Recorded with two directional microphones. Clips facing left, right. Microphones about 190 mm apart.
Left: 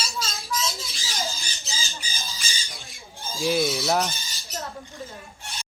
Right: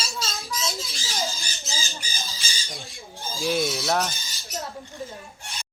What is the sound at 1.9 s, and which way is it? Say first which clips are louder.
Squawk: right 1 dB; 35° right (ahead or behind).